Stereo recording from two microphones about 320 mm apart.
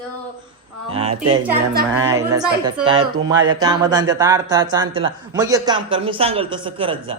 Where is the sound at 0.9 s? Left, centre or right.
Centre.